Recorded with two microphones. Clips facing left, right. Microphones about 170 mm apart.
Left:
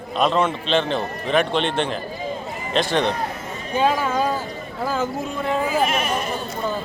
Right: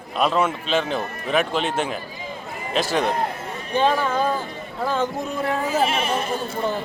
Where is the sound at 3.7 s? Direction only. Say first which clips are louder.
Even; 10° left (ahead or behind).